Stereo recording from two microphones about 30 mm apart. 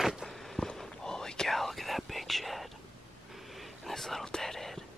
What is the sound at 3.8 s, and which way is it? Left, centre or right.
Whispering, centre.